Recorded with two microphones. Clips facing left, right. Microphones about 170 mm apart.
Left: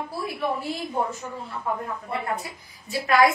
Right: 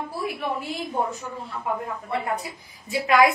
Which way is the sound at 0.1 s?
15° right (ahead or behind).